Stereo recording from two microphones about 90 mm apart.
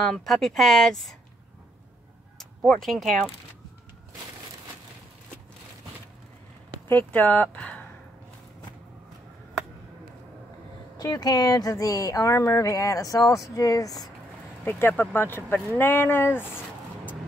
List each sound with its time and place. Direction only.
0.0 s speech: 5° left (ahead or behind)
2.3 s a sound: 5° left (ahead or behind)
6.9 s speech: 20° left (ahead or behind)
11.0 s speech: 45° left (ahead or behind)
14.6 s speech: 25° left (ahead or behind)